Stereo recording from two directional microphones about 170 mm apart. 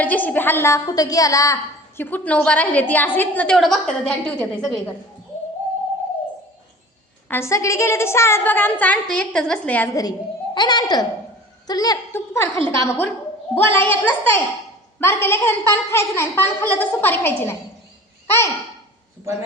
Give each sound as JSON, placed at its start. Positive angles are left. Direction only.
{"t": 0.0, "sound": "a woman's voice", "side_deg": 10}
{"t": 7.3, "sound": "a woman's voice", "side_deg": 15}
{"t": 9.9, "sound": "a woman's voice", "side_deg": 20}